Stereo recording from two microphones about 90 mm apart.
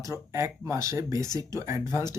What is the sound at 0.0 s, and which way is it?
Speech, 35° right (ahead or behind).